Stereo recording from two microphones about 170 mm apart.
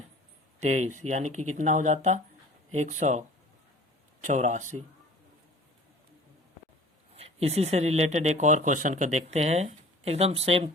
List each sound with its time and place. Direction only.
0.6 s speech: 40° right (ahead or behind)
7.2 s speech: 35° right (ahead or behind)